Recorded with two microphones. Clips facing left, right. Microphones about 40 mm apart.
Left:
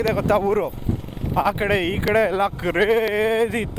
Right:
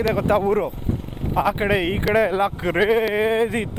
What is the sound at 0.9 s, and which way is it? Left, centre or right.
Vehicle, right.